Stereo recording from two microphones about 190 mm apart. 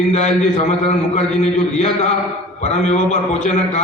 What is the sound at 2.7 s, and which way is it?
A man's voice, 35° left (ahead or behind).